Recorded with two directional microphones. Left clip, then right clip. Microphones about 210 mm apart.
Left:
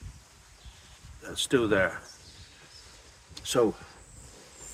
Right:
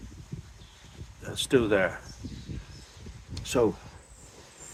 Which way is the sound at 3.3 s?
15° right (ahead or behind).